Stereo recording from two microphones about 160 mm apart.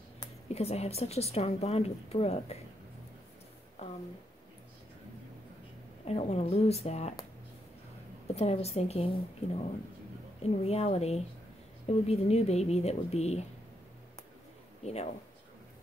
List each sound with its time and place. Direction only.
0.5 s speech: 40° left (ahead or behind)
3.8 s a sound: 40° left (ahead or behind)
6.0 s speech: 40° left (ahead or behind)
8.4 s speech: 40° left (ahead or behind)
14.8 s speech: 40° left (ahead or behind)